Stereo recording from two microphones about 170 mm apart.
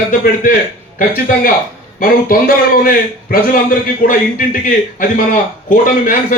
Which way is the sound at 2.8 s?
55° left (ahead or behind).